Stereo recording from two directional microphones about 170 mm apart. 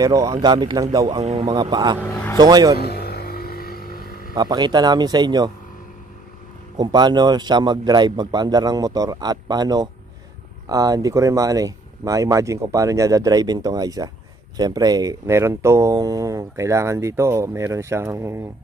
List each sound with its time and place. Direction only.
0.0 s speech: 20° right (ahead or behind)
1.2 s speech: 40° right (ahead or behind)
1.5 s speech: 25° right (ahead or behind)
2.8 s vehicle: 70° left (ahead or behind)
4.4 s speech: 25° right (ahead or behind)
6.8 s speech: 25° right (ahead or behind)